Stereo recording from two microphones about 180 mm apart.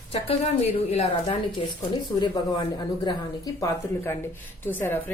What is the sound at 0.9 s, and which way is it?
A woman's voice, 30° left (ahead or behind).